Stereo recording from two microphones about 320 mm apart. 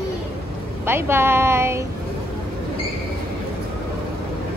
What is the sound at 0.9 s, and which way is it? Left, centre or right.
Speech, centre.